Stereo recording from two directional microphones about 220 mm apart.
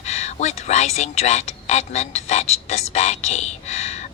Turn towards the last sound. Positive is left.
turn(degrees=30)  # may be behind; listen again after turning